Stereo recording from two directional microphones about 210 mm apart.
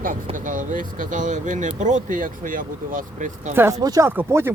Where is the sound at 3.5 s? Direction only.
15° right (ahead or behind).